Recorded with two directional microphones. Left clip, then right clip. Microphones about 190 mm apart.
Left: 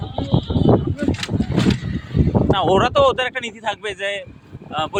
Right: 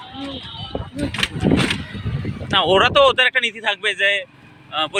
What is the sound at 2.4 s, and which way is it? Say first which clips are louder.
Speech: right 2 dB; 15° left (ahead or behind).